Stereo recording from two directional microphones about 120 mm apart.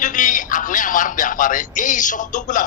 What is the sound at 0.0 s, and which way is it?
A man's voice, 90° left.